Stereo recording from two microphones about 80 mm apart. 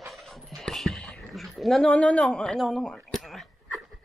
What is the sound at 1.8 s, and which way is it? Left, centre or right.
Speech, centre.